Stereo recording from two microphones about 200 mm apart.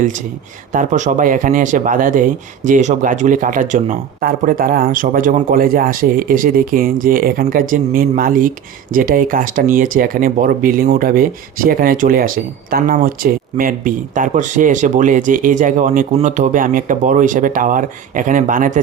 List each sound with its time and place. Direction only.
0.7 s speech: 40° right (ahead or behind)